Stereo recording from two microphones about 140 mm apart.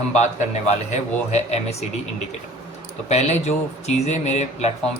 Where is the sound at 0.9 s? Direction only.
50° left (ahead or behind).